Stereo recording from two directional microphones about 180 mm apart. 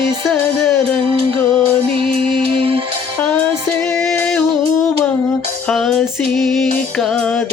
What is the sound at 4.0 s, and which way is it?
Music, 5° left (ahead or behind).